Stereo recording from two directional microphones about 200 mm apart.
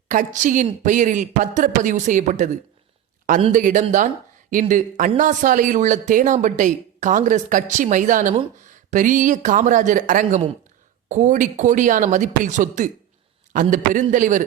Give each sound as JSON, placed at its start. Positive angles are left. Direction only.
{"t": 0.1, "sound": "speech", "side_deg": -40}
{"t": 3.5, "sound": "speech", "side_deg": -40}